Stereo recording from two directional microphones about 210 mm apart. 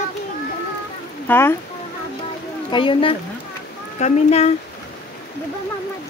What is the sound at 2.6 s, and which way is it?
Speech, 25° left (ahead or behind).